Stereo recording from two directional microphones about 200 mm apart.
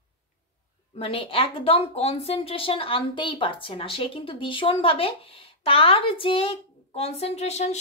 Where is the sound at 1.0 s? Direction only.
30° left (ahead or behind).